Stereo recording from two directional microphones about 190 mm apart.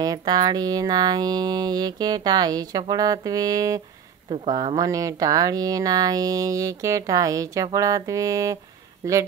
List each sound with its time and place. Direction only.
0.0 s speech: 20° right (ahead or behind)